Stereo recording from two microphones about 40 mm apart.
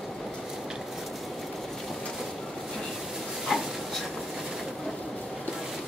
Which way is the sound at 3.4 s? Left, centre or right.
Centre.